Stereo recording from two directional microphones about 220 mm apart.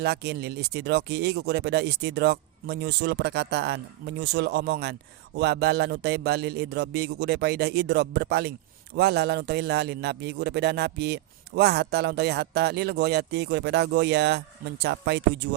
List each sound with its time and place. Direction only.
0.0 s a man's voice: 50° right (ahead or behind)